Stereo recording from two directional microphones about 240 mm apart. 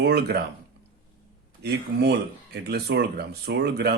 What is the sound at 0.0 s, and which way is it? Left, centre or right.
Speech, right.